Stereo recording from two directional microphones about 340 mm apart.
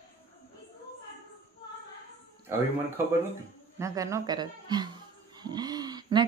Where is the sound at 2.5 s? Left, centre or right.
Centre.